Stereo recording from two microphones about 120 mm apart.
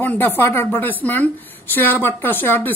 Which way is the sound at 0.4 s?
20° left (ahead or behind).